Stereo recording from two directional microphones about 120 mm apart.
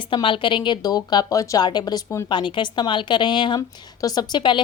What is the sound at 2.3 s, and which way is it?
A woman's voice, 40° left (ahead or behind).